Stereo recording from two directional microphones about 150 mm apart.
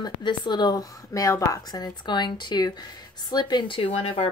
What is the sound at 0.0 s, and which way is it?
Speech, 30° left (ahead or behind).